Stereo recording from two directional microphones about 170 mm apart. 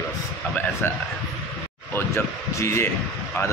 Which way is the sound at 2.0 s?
15° left (ahead or behind).